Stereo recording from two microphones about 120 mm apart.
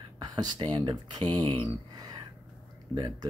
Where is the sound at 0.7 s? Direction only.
40° right (ahead or behind).